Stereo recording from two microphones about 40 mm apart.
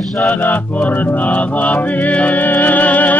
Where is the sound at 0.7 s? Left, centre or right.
Left.